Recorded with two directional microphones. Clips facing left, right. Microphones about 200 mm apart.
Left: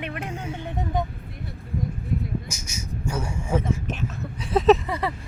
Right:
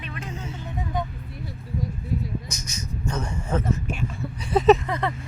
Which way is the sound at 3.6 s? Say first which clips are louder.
Even; 10° right (ahead or behind).